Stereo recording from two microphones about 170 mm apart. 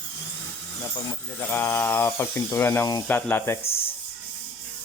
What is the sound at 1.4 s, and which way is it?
Speech, 10° left (ahead or behind).